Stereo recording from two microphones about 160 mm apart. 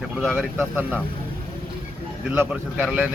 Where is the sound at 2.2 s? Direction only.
10° right (ahead or behind).